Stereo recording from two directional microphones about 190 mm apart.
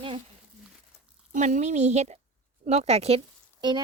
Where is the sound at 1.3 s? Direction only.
40° right (ahead or behind); by 3.8 s 25° right (ahead or behind).